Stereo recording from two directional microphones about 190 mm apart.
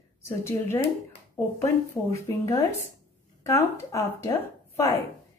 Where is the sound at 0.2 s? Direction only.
15° left (ahead or behind).